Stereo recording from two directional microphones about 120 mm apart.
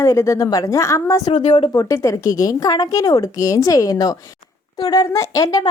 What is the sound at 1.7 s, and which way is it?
A woman's voice, 25° left (ahead or behind).